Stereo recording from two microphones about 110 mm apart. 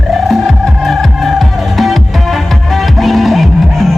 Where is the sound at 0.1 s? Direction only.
Centre (ahead or behind).